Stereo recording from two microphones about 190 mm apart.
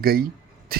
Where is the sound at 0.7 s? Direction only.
50° right (ahead or behind).